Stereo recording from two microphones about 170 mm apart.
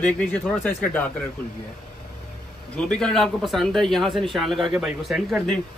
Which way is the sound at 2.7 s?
5° left (ahead or behind).